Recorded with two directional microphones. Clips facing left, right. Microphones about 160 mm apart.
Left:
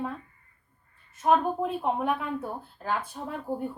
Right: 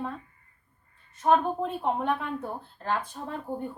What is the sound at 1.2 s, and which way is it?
A woman's voice, 5° left (ahead or behind).